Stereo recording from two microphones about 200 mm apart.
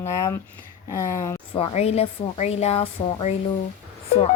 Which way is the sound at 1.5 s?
30° left (ahead or behind).